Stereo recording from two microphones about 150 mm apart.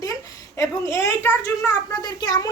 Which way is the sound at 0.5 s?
20° left (ahead or behind).